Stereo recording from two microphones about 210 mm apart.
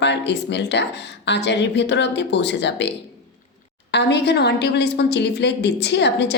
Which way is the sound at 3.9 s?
55° left (ahead or behind).